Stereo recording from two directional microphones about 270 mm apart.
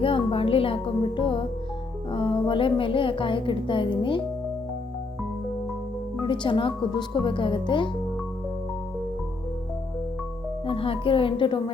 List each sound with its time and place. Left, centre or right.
0.0 s a woman's voice: centre
6.2 s speech: centre
10.7 s a woman's voice: centre